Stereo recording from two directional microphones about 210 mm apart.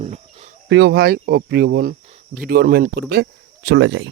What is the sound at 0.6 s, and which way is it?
Speech, 55° right (ahead or behind).